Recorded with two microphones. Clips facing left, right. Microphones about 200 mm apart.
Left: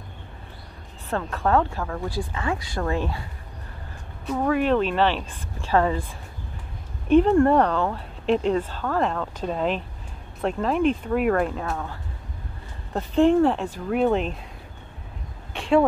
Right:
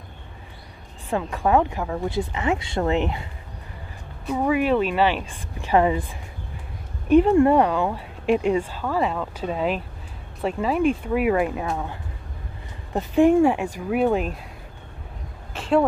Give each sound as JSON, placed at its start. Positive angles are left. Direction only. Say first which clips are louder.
{"t": 1.1, "sound": "speech", "louder": "right 2 dB", "side_deg": -15}
{"t": 4.3, "sound": "speech", "louder": "right 1 dB", "side_deg": -10}
{"t": 7.1, "sound": "speech", "louder": "right 1 dB", "side_deg": -10}
{"t": 15.5, "sound": "a sound", "louder": "left 1 dB", "side_deg": 0}